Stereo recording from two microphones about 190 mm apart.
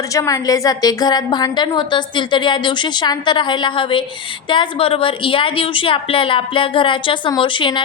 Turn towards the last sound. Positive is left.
turn(degrees=25)  # may be behind; listen again after turning